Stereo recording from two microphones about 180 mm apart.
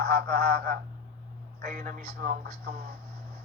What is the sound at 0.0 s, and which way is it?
Speech, 60° right (ahead or behind).